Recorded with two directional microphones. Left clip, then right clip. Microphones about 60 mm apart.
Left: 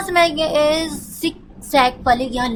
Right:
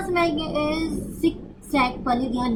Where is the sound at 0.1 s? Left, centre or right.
Left.